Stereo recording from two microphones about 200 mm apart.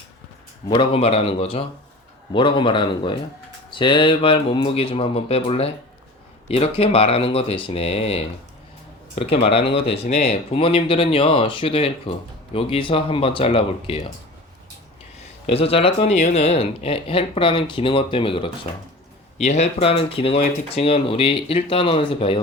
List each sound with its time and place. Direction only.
0.7 s speech: 25° left (ahead or behind)
15.4 s speech: 30° left (ahead or behind)